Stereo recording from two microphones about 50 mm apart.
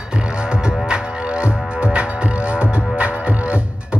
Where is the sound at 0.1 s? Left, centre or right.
Centre.